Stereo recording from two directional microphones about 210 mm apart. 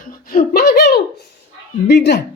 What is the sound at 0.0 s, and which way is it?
Giggle, 40° left (ahead or behind).